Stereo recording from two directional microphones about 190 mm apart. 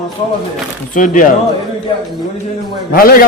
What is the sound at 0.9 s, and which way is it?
Speech, 45° left (ahead or behind).